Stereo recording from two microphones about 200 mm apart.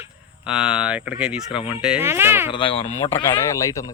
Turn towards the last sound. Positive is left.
turn(degrees=15)  # may be behind; listen again after turning